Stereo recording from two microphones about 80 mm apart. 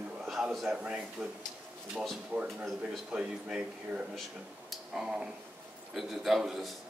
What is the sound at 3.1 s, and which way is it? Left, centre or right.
Speech, centre.